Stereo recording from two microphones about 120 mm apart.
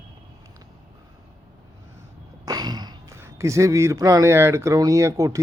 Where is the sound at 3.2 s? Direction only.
25° right (ahead or behind).